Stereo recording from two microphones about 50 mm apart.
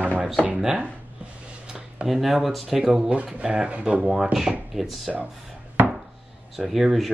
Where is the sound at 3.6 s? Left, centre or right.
Right.